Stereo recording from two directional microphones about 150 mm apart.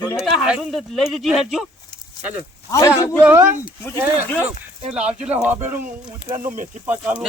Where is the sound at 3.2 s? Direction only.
15° right (ahead or behind).